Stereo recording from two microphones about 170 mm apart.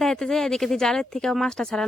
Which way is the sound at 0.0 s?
5° left (ahead or behind).